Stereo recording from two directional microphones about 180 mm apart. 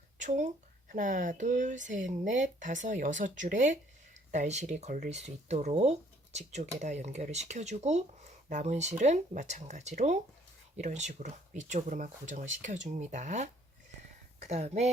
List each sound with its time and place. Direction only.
0.2 s speech: 40° right (ahead or behind)